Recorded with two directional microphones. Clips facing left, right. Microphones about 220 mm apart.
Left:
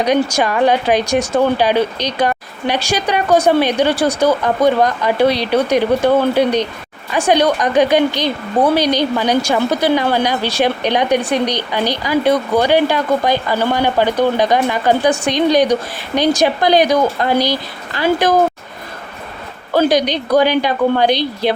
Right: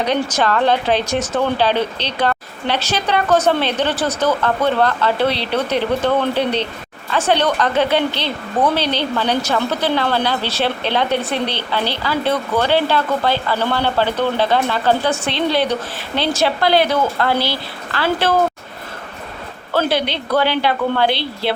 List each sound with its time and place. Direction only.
0.0 s speech: 10° left (ahead or behind)
19.7 s speech: 15° left (ahead or behind)